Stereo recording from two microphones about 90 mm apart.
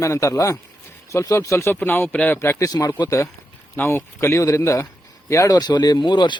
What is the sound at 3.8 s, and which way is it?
A man's voice, 30° left (ahead or behind).